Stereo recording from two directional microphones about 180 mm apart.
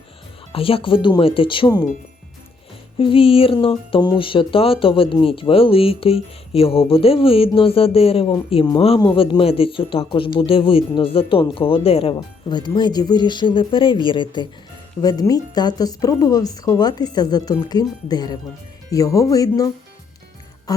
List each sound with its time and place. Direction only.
0.5 s speech: 30° left (ahead or behind)
3.0 s speech: 30° left (ahead or behind)